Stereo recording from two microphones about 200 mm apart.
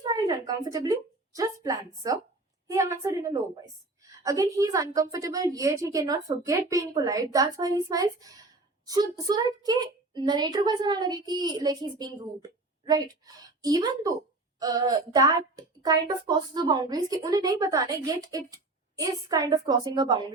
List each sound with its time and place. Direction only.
0.0 s a woman's voice: 20° right (ahead or behind)